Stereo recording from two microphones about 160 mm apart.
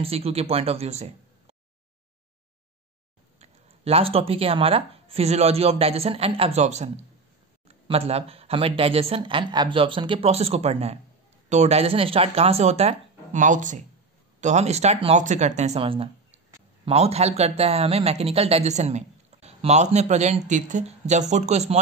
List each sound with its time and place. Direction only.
0.0 s speech: 40° right (ahead or behind)
3.3 s a man's voice: 40° right (ahead or behind)